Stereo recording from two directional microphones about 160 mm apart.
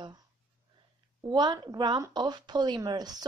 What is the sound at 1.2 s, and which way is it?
Speech, 25° right (ahead or behind).